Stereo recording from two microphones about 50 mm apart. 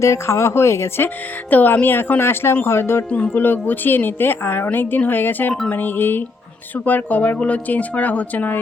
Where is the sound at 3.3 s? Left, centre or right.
Left.